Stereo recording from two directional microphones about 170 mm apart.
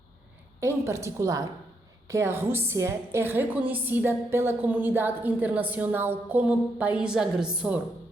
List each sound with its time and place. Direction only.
0.6 s a woman's voice: 15° right (ahead or behind)